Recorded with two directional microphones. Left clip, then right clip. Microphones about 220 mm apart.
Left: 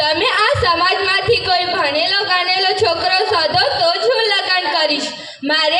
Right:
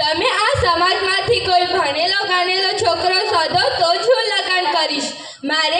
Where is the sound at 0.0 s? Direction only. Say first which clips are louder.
Left 2 dB; 45° left (ahead or behind).